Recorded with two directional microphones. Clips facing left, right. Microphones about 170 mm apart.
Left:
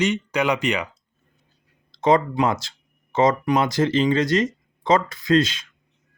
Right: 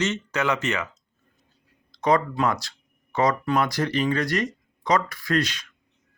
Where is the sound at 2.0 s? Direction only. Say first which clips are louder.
Left 3 dB; 25° left (ahead or behind).